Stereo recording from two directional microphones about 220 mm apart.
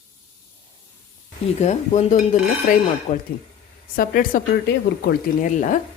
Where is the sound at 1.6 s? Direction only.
30° left (ahead or behind).